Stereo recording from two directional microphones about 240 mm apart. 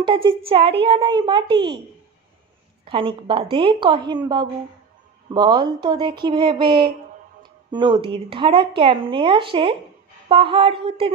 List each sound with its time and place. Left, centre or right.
0.0 s speech: right
2.8 s speech: right
5.3 s speech: centre